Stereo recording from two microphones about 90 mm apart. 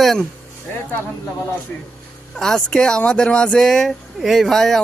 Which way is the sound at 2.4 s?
5° left (ahead or behind).